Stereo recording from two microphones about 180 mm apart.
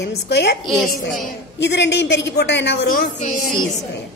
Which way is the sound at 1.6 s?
75° left (ahead or behind).